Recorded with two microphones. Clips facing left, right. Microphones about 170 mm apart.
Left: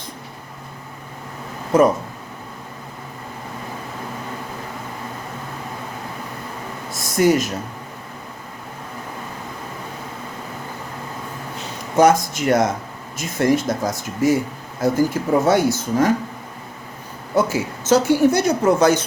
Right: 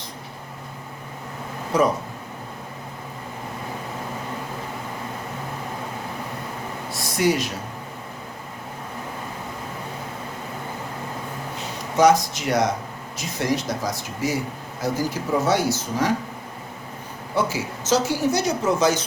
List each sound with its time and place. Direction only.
6.9 s a sound: 45° left (ahead or behind)
11.9 s speech: 50° left (ahead or behind)
17.3 s a woman's voice: 50° left (ahead or behind)